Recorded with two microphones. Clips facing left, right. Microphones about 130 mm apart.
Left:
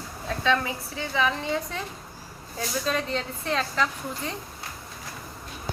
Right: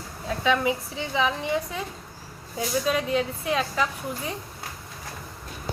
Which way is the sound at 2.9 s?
10° right (ahead or behind).